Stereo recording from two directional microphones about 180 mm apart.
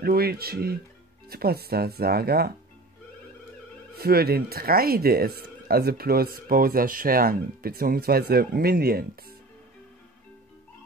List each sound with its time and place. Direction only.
0.0 s speech: 60° right (ahead or behind)
3.9 s speech: 60° right (ahead or behind)